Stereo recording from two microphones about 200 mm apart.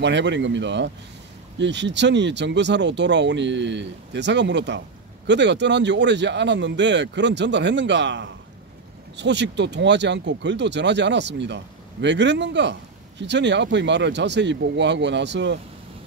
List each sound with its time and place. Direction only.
0.0 s speech: 60° right (ahead or behind)